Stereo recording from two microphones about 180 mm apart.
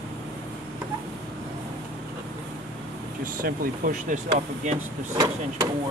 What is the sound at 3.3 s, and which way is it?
Speech, 50° right (ahead or behind).